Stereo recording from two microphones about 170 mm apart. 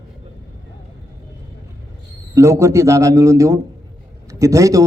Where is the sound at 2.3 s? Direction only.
15° right (ahead or behind).